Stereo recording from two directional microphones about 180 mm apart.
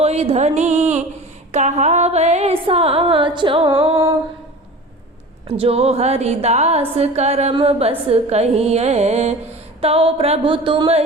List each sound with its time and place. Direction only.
0.0 s a woman's voice: 35° right (ahead or behind)
5.5 s a woman's voice: 30° right (ahead or behind)